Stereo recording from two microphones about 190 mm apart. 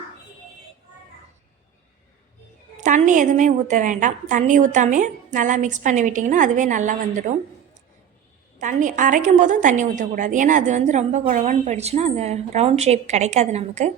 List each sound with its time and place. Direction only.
2.7 s a woman's voice: 40° right (ahead or behind)
8.5 s a woman's voice: 40° right (ahead or behind)